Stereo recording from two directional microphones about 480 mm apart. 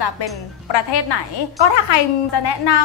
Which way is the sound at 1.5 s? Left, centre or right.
Left.